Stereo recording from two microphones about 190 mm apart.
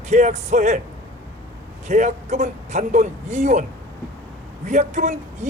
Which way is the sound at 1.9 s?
40° right (ahead or behind).